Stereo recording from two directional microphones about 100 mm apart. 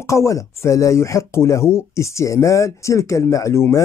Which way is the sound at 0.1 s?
30° left (ahead or behind).